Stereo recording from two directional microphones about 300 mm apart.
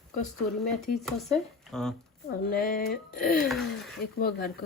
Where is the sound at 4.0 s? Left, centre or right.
Left.